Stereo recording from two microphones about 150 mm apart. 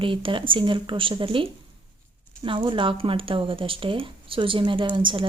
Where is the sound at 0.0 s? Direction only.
35° right (ahead or behind).